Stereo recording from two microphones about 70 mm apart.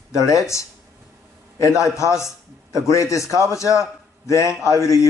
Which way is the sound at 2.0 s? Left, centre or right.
Left.